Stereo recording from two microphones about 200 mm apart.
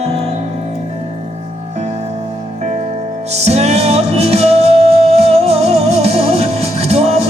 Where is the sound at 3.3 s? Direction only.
30° right (ahead or behind).